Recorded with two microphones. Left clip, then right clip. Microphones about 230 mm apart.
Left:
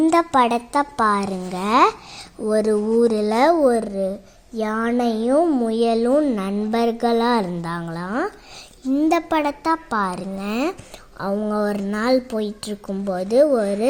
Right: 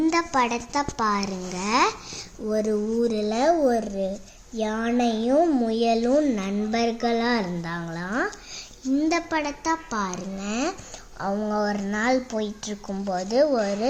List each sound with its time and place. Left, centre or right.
0.0 s a woman's voice: left